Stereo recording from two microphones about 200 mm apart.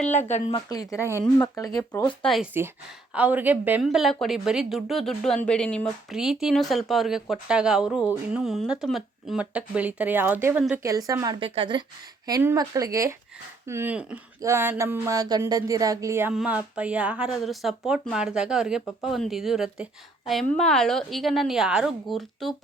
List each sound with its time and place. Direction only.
0.1 s speech: 35° left (ahead or behind)
0.5 s speech: 20° left (ahead or behind)
2.2 s a woman's voice: centre (ahead or behind)
10.8 s a woman's voice: 15° right (ahead or behind)
12.2 s a woman's voice: 15° right (ahead or behind); by 22.5 s centre (ahead or behind)